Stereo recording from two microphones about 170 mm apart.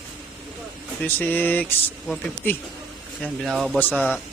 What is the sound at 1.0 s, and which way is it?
Speech, 10° left (ahead or behind).